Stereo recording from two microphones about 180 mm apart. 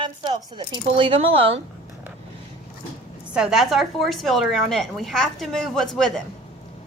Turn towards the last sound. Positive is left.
turn(degrees=5)  # may be behind; listen again after turning